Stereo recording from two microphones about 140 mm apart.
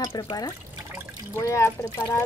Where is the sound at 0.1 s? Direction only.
30° left (ahead or behind).